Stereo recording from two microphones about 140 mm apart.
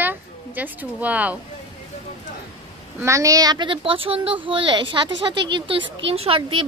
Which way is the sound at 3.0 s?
20° right (ahead or behind).